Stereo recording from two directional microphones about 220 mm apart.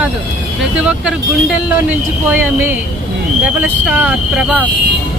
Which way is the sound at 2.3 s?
10° right (ahead or behind).